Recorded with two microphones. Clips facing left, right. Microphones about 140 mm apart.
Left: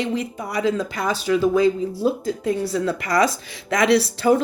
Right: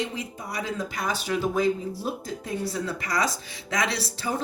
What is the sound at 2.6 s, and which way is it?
Speech, 65° left (ahead or behind).